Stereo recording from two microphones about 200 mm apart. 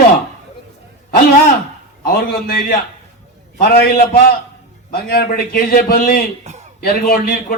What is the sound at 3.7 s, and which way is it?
A man's voice, 50° left (ahead or behind).